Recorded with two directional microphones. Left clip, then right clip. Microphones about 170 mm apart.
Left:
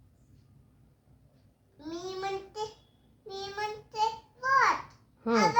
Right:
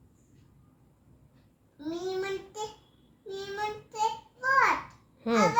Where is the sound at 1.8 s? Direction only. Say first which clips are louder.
Right 4 dB; 10° left (ahead or behind).